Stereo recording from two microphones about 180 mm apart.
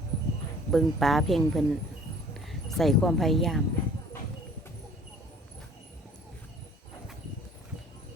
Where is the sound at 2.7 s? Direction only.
Centre (ahead or behind).